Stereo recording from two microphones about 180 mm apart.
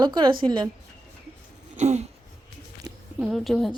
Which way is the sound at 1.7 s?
40° right (ahead or behind).